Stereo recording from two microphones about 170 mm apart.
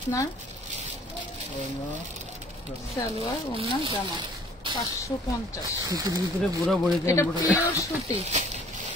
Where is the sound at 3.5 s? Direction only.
35° right (ahead or behind).